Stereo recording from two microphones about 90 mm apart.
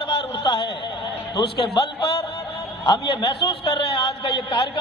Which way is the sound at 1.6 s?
70° left (ahead or behind).